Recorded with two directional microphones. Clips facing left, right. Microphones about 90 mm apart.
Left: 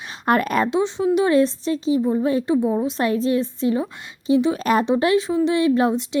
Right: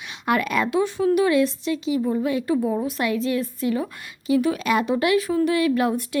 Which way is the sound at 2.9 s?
35° left (ahead or behind).